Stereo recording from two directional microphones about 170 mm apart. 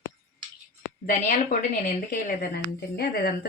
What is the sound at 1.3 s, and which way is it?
A woman's voice, 50° left (ahead or behind).